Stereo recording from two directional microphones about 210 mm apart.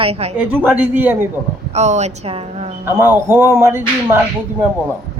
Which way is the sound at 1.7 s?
30° right (ahead or behind).